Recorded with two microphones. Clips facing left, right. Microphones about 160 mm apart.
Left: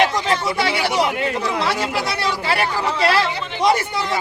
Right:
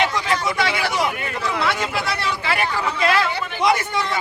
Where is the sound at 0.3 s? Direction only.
35° left (ahead or behind).